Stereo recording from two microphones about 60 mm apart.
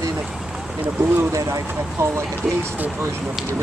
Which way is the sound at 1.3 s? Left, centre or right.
Right.